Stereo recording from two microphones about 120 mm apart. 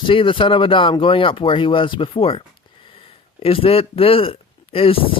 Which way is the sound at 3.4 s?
50° left (ahead or behind).